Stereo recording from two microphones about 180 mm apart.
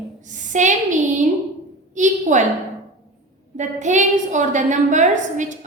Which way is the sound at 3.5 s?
45° right (ahead or behind).